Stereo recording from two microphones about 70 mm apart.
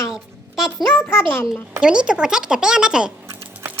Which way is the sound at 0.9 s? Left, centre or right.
Left.